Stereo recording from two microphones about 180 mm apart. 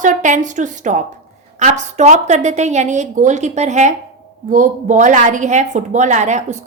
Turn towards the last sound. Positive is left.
turn(degrees=-40)  # may be behind; listen again after turning